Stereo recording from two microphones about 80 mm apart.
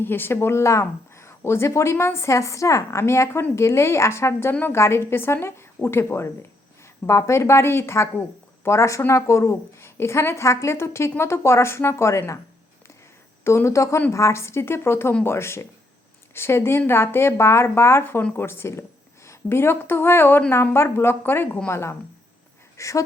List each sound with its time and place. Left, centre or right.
0.0 s a woman's voice: left
13.4 s a woman's voice: left